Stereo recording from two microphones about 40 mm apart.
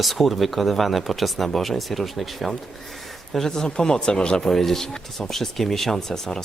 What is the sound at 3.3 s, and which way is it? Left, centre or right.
Speech, centre.